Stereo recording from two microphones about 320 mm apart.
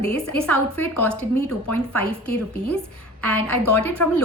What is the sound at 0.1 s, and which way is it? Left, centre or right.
Speech, centre.